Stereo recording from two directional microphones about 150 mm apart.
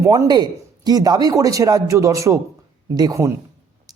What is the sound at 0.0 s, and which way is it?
Speech, 25° right (ahead or behind).